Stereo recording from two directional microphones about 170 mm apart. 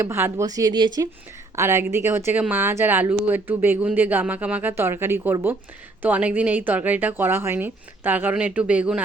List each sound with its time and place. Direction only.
0.0 s speech: 15° right (ahead or behind)
1.5 s a woman's voice: 15° right (ahead or behind)